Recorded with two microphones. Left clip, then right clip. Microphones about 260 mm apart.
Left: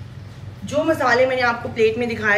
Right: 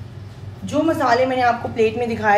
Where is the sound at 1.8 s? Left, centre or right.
Right.